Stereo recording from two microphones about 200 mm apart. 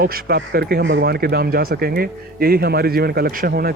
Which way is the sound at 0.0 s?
45° right (ahead or behind).